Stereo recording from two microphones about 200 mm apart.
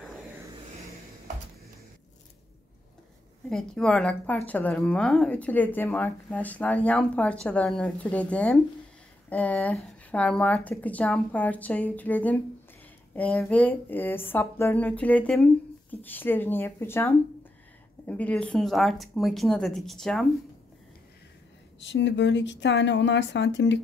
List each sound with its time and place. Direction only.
3.4 s a woman's voice: 5° left (ahead or behind)
21.7 s speech: 65° left (ahead or behind)